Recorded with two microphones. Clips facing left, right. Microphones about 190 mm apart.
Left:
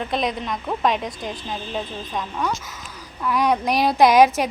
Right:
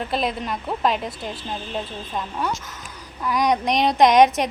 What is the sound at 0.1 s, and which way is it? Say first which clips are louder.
A woman's voice: even; 5° right (ahead or behind).